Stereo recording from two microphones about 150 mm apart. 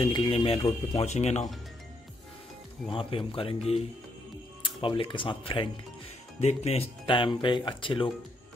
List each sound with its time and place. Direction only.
0.0 s speech: 35° left (ahead or behind)
2.9 s speech: 35° left (ahead or behind)